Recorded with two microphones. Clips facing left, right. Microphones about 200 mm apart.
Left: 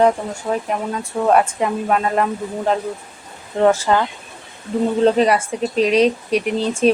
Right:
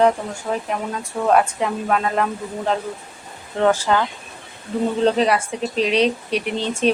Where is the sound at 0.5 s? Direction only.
15° left (ahead or behind).